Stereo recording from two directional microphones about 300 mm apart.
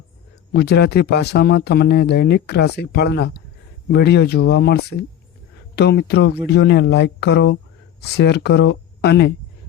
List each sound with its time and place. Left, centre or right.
0.5 s speech: left